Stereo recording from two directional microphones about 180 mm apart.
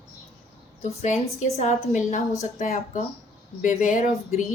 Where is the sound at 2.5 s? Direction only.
50° left (ahead or behind).